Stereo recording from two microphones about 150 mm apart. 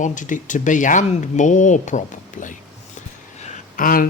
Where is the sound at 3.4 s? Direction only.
70° left (ahead or behind).